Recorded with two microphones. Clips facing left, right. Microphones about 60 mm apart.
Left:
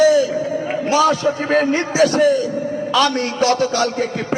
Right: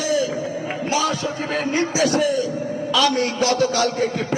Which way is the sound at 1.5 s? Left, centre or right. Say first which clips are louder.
Left 4 dB; left.